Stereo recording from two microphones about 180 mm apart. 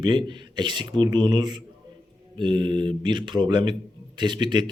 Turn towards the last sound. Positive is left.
turn(degrees=-25)  # may be behind; listen again after turning